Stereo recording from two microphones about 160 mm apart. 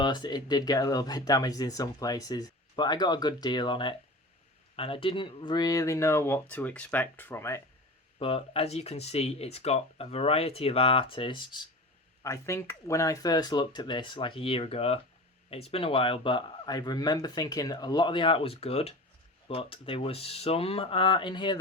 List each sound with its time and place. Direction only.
0.0 s speech: 30° left (ahead or behind)
8.2 s speech: 35° left (ahead or behind)
12.2 s speech: 20° left (ahead or behind)